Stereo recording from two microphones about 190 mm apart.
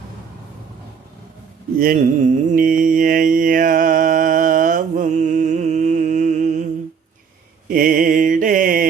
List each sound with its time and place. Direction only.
1.8 s mantra: 45° right (ahead or behind)
7.7 s mantra: 50° right (ahead or behind)